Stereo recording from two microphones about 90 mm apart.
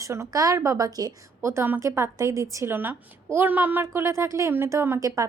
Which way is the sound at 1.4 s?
30° right (ahead or behind).